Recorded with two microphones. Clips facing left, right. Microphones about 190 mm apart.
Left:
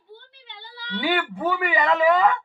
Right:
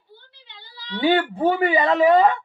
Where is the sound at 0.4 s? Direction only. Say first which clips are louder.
Left 3 dB; 55° left (ahead or behind).